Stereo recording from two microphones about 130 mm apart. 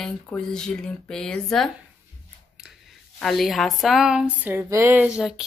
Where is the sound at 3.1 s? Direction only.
Centre (ahead or behind).